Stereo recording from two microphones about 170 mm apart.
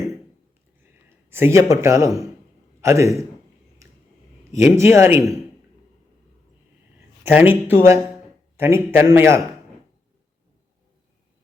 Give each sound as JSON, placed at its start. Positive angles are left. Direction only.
{"t": 1.3, "sound": "a man's voice", "side_deg": -15}
{"t": 4.5, "sound": "a man's voice", "side_deg": -15}
{"t": 7.3, "sound": "a man's voice", "side_deg": -10}